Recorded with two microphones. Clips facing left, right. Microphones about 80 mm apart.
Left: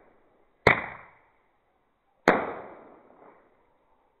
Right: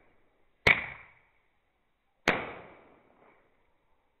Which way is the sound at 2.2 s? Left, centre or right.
Left.